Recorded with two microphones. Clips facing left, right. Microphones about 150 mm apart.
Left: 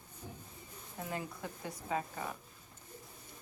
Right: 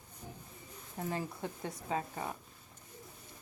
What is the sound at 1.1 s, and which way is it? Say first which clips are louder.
Speech: right 3 dB; 30° right (ahead or behind).